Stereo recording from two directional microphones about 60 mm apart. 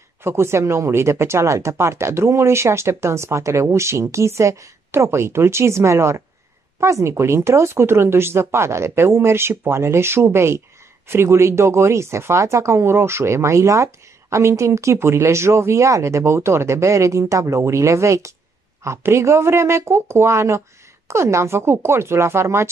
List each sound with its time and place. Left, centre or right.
0.2 s speech: right